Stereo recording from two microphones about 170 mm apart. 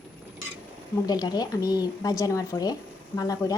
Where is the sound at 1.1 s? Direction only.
25° left (ahead or behind).